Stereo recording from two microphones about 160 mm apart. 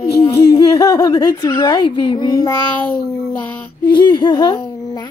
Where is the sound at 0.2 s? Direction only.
25° left (ahead or behind).